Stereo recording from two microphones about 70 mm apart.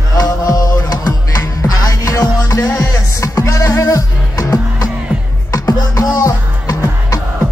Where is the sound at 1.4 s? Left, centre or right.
Left.